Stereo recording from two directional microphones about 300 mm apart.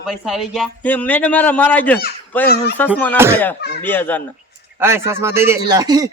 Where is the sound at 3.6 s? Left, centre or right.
Left.